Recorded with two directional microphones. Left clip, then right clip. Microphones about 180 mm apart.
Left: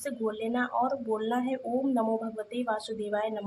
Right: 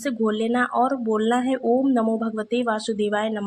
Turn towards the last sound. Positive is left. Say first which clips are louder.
# right 7 dB
turn(degrees=-25)  # may be behind; listen again after turning